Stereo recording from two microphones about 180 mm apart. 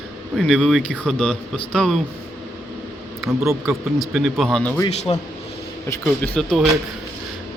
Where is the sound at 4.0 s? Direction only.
Centre (ahead or behind).